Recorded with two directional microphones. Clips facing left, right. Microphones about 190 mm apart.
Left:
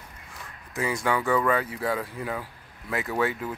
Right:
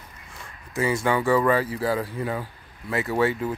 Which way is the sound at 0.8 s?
Centre (ahead or behind).